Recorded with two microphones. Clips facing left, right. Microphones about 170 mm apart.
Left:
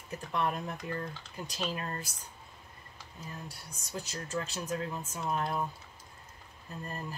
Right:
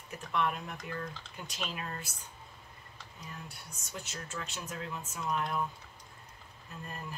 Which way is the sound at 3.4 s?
35° left (ahead or behind).